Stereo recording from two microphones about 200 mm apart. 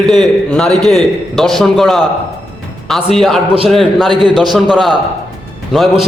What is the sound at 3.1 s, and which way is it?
Speech, centre (ahead or behind).